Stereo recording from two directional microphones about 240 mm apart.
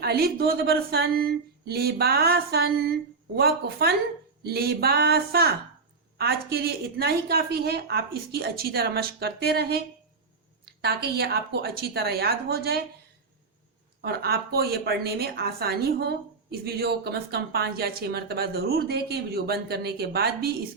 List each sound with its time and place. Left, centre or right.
0.0 s a woman's voice: right
14.0 s a woman's voice: right